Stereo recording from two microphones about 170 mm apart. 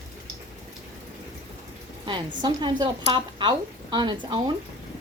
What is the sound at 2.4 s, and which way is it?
A woman's voice, 25° right (ahead or behind).